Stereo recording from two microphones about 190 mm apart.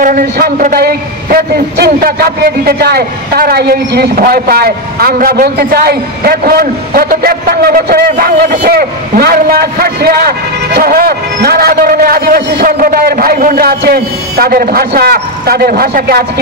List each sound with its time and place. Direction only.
0.0 s a man's voice: 45° right (ahead or behind)